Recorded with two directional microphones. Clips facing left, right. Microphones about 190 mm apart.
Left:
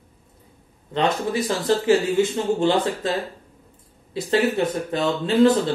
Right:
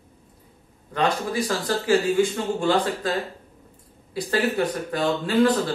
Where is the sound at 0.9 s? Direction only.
25° left (ahead or behind).